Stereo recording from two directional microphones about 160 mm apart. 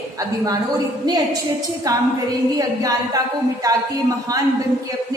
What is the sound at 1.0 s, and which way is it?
A woman's voice, 25° right (ahead or behind).